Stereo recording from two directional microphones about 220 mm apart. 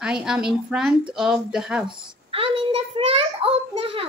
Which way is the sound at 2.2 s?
25° right (ahead or behind).